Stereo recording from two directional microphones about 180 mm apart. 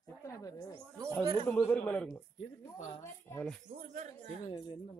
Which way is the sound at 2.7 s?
40° left (ahead or behind).